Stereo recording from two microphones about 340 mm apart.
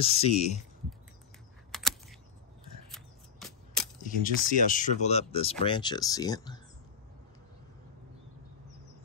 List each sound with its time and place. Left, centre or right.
0.0 s speech: centre
1.7 s computer keyboard: centre
2.9 s scissors: centre
4.0 s speech: left